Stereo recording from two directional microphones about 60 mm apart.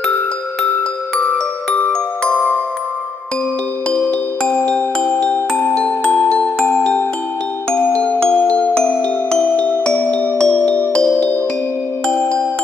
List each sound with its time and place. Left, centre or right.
2.2 s glockenspiel: left
3.9 s music: left
6.8 s glockenspiel: left
7.7 s music: left